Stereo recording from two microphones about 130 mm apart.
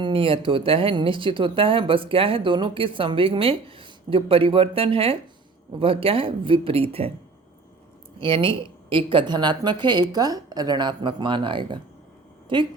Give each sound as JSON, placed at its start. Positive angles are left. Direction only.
{"t": 0.0, "sound": "speech", "side_deg": -40}
{"t": 8.2, "sound": "speech", "side_deg": -40}